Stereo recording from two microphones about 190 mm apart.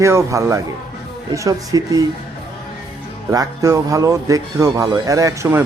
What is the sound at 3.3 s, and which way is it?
Speech, 20° right (ahead or behind).